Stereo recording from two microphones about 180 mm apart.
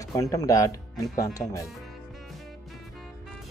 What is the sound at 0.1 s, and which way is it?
Speech, 15° left (ahead or behind).